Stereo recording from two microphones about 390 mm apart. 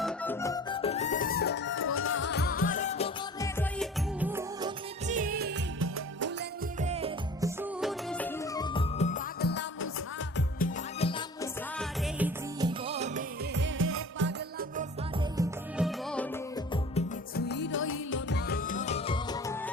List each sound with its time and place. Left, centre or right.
0.0 s music: centre
5.0 s music of bollywood: centre
6.8 s music: centre
11.8 s music: centre; by 14.3 s right
15.4 s music: centre
16.9 s music: left; by 19.7 s centre